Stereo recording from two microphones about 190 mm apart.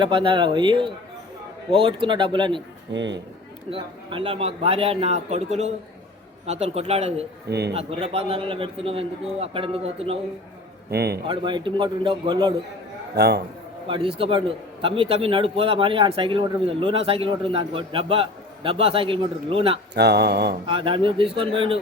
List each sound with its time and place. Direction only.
0.0 s a man's voice: 25° right (ahead or behind)
2.9 s a man's voice: 70° right (ahead or behind)
3.7 s a man's voice: 25° right (ahead or behind)
10.9 s speech: 55° right (ahead or behind)
11.3 s a man's voice: 25° right (ahead or behind)
13.1 s speech: 60° right (ahead or behind)
13.8 s a man's voice: 25° right (ahead or behind)
19.9 s speech: 60° right (ahead or behind)
20.7 s a man's voice: 25° right (ahead or behind)